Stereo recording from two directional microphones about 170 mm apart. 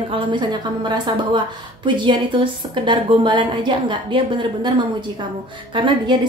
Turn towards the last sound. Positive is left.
turn(degrees=-30)  # may be behind; listen again after turning